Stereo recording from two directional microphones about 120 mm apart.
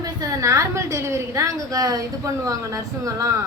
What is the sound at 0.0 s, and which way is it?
A woman's voice, 30° right (ahead or behind).